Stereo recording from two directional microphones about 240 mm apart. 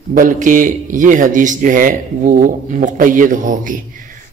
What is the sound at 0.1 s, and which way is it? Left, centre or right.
A man's voice, right.